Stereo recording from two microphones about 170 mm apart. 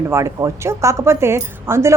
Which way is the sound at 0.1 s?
15° right (ahead or behind).